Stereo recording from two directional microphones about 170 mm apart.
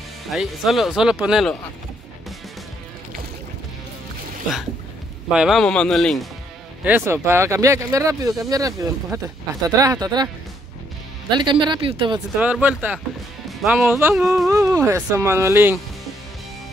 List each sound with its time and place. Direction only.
0.3 s speech: centre (ahead or behind)
5.3 s speech: 5° right (ahead or behind)
6.8 s speech: 10° right (ahead or behind); by 12.2 s 30° right (ahead or behind)
12.4 s speech: 10° right (ahead or behind)
13.9 s speech: 10° right (ahead or behind)
14.2 s speech: centre (ahead or behind)
14.7 s speech: 15° right (ahead or behind)